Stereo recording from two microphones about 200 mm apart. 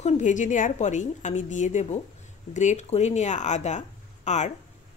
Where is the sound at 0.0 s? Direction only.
40° left (ahead or behind).